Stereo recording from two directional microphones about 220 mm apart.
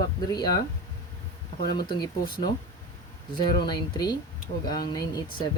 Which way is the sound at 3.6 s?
20° left (ahead or behind).